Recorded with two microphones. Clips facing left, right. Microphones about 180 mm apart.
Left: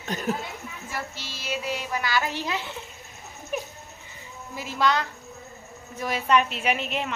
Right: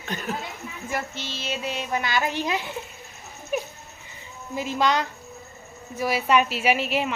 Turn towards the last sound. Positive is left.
turn(degrees=-5)  # may be behind; listen again after turning